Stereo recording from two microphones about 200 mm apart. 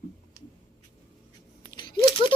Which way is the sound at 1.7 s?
25° left (ahead or behind).